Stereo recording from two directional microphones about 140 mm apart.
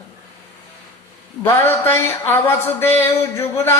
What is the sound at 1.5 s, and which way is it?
Speech, 15° left (ahead or behind).